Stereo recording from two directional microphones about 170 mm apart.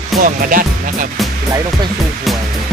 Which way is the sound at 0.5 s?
55° right (ahead or behind).